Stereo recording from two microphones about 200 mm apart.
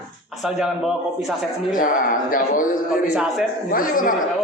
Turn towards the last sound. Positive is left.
turn(degrees=45)  # may be behind; listen again after turning